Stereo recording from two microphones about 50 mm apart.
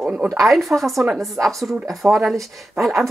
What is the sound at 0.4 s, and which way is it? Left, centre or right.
Speech, centre.